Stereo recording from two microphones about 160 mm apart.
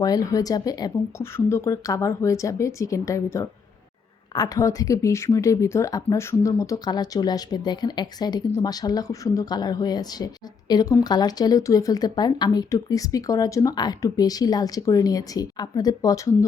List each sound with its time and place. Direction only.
0.0 s speech: 20° left (ahead or behind)